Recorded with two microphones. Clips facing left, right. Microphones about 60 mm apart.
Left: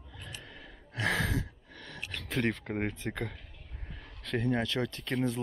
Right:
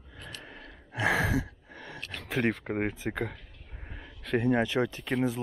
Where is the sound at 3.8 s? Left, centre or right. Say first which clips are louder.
Right 3 dB; centre.